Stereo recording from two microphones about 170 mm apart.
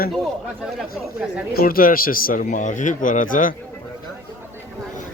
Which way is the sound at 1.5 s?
60° left (ahead or behind).